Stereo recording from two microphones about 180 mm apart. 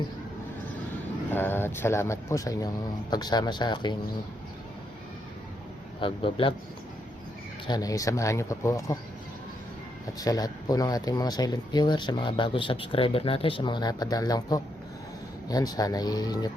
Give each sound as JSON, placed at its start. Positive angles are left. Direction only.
{"t": 1.3, "sound": "speech", "side_deg": 10}
{"t": 6.0, "sound": "speech", "side_deg": 30}
{"t": 7.7, "sound": "speech", "side_deg": 20}
{"t": 10.2, "sound": "speech", "side_deg": 20}